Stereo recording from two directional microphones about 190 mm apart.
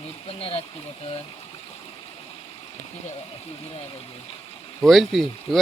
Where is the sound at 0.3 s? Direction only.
30° left (ahead or behind).